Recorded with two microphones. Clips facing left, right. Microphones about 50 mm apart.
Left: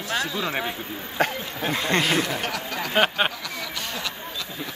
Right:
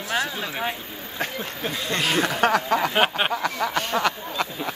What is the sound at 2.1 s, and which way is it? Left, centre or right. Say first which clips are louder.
Speech: right 5 dB; right.